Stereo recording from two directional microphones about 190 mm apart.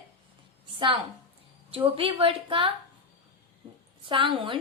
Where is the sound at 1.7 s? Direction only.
30° right (ahead or behind).